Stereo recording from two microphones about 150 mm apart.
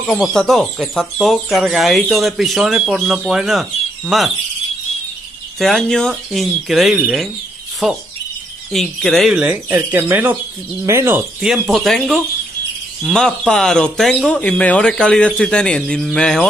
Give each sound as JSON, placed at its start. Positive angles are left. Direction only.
{"t": 0.0, "sound": "speech", "side_deg": 0}
{"t": 5.6, "sound": "speech", "side_deg": 5}
{"t": 9.4, "sound": "speech", "side_deg": -15}
{"t": 11.4, "sound": "speech", "side_deg": -5}